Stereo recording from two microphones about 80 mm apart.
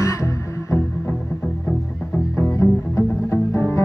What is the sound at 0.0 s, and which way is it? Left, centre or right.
Music, left.